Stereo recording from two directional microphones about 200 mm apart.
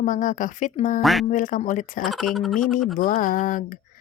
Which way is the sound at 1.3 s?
40° left (ahead or behind).